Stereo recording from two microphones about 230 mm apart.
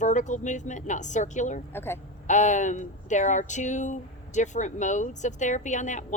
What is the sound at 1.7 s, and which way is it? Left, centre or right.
Speech, centre.